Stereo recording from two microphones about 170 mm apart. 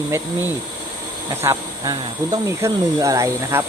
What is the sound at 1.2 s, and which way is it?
Speech, 20° right (ahead or behind).